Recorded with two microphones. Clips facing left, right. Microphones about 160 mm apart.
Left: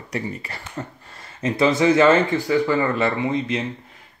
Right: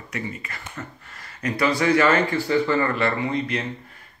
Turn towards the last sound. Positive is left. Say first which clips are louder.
# left 2 dB
turn(degrees=20)  # may be behind; listen again after turning